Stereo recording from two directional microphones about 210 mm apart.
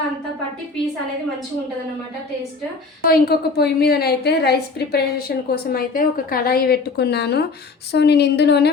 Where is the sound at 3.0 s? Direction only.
45° left (ahead or behind).